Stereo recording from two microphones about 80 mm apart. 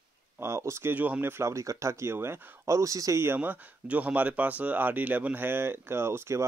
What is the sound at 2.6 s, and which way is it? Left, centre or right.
Speech, right.